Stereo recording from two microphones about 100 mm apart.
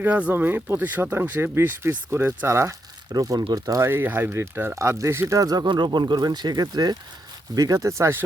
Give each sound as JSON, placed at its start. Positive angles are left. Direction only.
{"t": 0.0, "sound": "speech", "side_deg": -15}
{"t": 3.1, "sound": "speech", "side_deg": -40}
{"t": 3.8, "sound": "speech", "side_deg": -20}